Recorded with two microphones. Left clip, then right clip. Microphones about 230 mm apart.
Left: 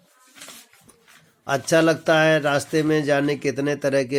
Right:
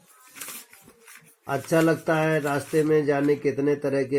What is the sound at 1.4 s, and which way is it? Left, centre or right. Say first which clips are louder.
Speech: left 4 dB; left.